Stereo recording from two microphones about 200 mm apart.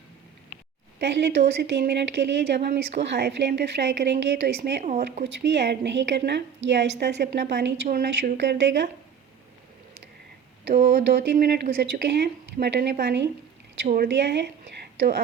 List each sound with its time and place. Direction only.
0.9 s a woman's voice: 60° right (ahead or behind)
4.8 s speech: 35° right (ahead or behind)
5.2 s a woman's voice: 60° right (ahead or behind)
10.7 s a woman's voice: 55° right (ahead or behind)